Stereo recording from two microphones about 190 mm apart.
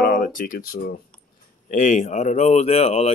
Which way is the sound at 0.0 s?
45° left (ahead or behind).